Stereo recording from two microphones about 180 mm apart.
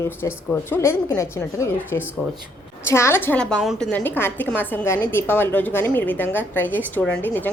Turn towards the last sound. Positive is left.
turn(degrees=10)  # may be behind; listen again after turning